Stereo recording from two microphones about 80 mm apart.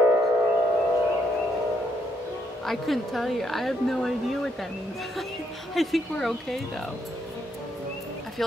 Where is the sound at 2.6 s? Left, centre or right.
Centre.